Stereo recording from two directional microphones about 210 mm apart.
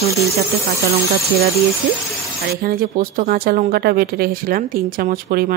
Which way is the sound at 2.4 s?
45° right (ahead or behind).